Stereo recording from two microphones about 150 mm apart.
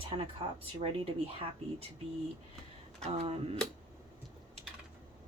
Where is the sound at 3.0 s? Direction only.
45° right (ahead or behind).